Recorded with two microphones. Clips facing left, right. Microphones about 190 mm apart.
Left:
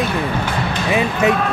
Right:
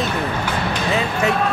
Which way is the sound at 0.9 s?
20° left (ahead or behind).